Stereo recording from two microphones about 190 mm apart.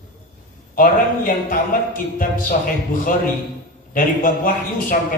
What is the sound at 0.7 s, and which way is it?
A man's voice, 45° left (ahead or behind).